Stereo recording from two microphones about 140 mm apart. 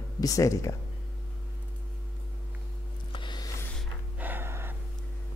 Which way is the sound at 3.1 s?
35° left (ahead or behind).